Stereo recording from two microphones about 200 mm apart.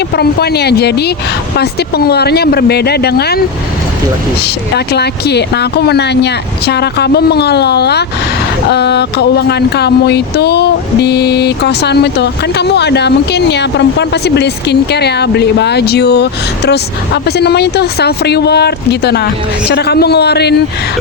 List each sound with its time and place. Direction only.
0.2 s speech: 55° left (ahead or behind)
4.7 s speech: 55° left (ahead or behind)